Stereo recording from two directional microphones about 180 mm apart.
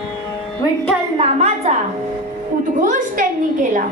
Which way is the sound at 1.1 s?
35° right (ahead or behind).